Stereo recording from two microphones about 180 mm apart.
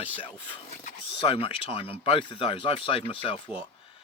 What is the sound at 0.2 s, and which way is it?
A man's voice, 30° left (ahead or behind).